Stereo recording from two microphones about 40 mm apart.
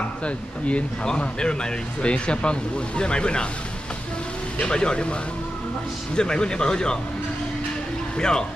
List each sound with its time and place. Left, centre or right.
0.2 s speech: left
4.6 s speech: left
6.1 s speech: left
8.2 s speech: centre